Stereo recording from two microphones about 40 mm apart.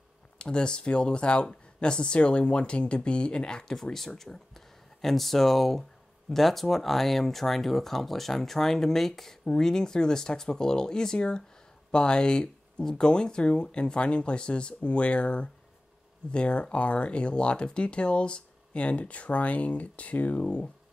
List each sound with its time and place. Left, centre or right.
0.4 s speech: left
3.7 s speech: centre; by 20.7 s left